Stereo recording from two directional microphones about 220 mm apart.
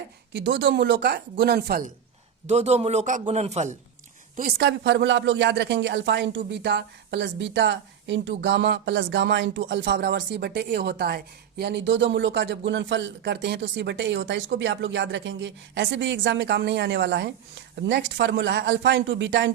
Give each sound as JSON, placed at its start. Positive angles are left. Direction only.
{"t": 0.3, "sound": "speech", "side_deg": -55}
{"t": 2.5, "sound": "a man's voice", "side_deg": -30}
{"t": 4.4, "sound": "speech", "side_deg": -45}